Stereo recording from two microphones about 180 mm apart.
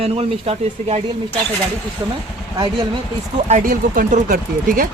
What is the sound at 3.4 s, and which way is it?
Speech, 45° right (ahead or behind).